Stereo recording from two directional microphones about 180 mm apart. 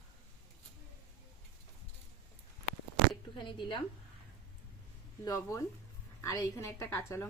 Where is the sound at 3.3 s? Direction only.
25° left (ahead or behind).